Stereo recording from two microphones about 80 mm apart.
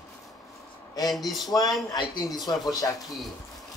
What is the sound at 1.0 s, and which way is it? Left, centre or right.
Speech, centre.